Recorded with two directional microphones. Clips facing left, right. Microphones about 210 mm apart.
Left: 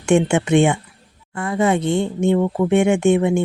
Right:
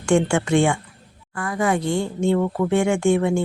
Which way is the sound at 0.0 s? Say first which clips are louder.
Left 3 dB; 20° left (ahead or behind).